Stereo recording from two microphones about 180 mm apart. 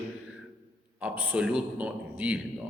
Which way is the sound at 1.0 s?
5° right (ahead or behind).